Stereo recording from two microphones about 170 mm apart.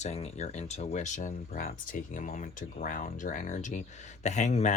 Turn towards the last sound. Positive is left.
turn(degrees=45)  # may be behind; listen again after turning